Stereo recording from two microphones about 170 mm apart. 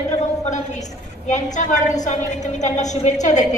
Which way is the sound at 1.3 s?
45° left (ahead or behind).